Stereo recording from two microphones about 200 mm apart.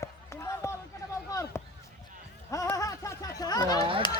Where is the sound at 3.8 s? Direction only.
25° right (ahead or behind).